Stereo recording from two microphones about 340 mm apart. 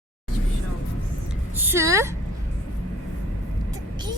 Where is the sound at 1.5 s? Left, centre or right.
Centre.